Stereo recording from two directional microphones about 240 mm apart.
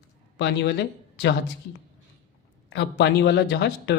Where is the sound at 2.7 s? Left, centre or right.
Left.